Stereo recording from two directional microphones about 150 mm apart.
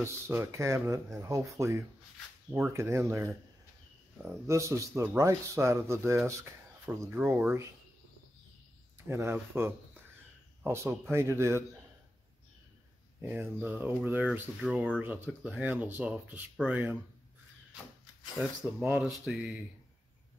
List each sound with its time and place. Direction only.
0.0 s speech: 15° right (ahead or behind)
4.5 s speech: 20° right (ahead or behind)
9.0 s speech: 20° right (ahead or behind)
13.2 s speech: 15° right (ahead or behind)
14.6 s speech: centre (ahead or behind)
15.0 s speech: 15° right (ahead or behind)
18.4 s speech: 5° right (ahead or behind)